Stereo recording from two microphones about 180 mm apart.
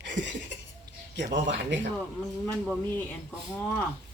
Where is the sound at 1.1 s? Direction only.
80° right.